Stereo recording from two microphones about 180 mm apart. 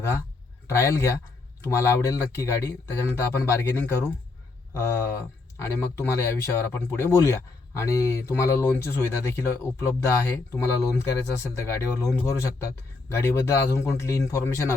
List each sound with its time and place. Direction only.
0.0 s a man's voice: 15° left (ahead or behind)